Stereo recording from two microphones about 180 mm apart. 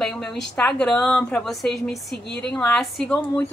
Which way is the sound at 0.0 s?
5° left (ahead or behind).